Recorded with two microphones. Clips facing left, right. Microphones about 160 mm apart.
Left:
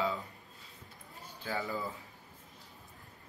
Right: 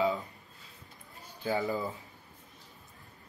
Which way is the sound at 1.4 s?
20° right (ahead or behind).